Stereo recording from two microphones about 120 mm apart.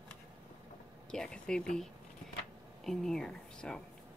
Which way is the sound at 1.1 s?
5° left (ahead or behind).